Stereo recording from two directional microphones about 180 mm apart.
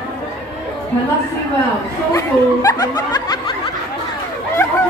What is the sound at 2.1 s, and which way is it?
Speech, 20° left (ahead or behind).